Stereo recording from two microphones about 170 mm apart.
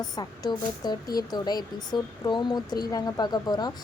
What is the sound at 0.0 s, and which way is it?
A woman's voice, 25° left (ahead or behind).